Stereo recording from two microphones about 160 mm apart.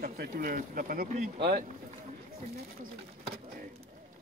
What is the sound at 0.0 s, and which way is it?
Speech, 65° right (ahead or behind).